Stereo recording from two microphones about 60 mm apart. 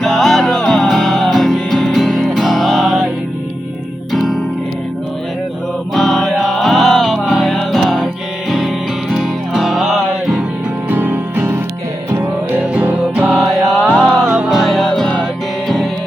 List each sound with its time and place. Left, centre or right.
0.0 s music: centre
4.1 s music: centre
5.9 s music: centre
10.8 s music: right
12.7 s music: right
13.4 s music: centre
13.8 s music: centre
14.5 s music: centre